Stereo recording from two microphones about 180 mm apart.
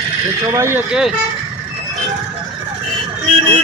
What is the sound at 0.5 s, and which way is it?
Speech, 15° right (ahead or behind).